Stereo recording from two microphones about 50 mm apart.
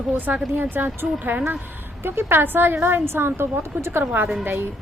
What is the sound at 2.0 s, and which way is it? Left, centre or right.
A woman's voice, right.